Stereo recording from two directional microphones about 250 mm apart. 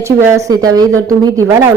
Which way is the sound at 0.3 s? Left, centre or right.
Centre.